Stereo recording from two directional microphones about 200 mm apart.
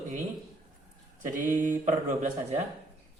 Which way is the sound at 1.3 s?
40° right (ahead or behind).